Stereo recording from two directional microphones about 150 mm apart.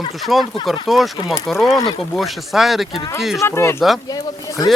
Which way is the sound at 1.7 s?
25° left (ahead or behind).